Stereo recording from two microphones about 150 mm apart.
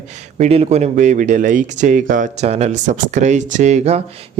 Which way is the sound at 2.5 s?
45° right (ahead or behind).